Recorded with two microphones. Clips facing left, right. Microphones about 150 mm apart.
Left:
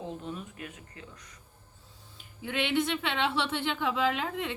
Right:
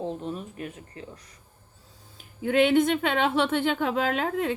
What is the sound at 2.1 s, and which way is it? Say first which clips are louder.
A woman's voice: right 11 dB; 45° right (ahead or behind).